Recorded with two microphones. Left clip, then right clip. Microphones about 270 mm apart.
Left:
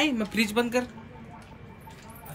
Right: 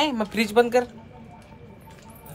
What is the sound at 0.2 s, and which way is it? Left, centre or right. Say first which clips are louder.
Speech: right 6 dB; centre.